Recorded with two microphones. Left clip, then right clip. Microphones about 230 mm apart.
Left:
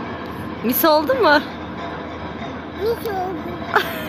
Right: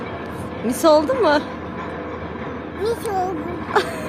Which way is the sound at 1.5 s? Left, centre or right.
Left.